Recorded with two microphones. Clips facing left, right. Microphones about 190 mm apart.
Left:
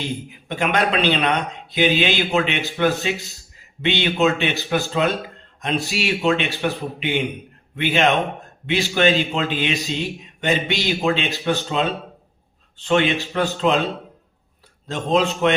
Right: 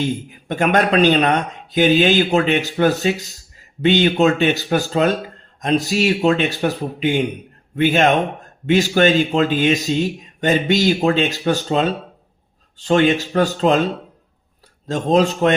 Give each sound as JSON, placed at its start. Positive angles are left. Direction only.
{"t": 0.0, "sound": "speech", "side_deg": -50}
{"t": 14.8, "sound": "speech", "side_deg": -40}